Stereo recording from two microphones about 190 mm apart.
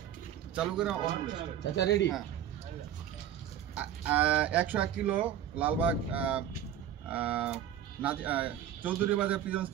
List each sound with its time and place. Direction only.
0.6 s speech: 5° right (ahead or behind)
1.6 s speech: 65° left (ahead or behind)
3.7 s speech: 10° right (ahead or behind)